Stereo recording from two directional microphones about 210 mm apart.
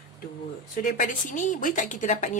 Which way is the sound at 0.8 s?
40° left (ahead or behind).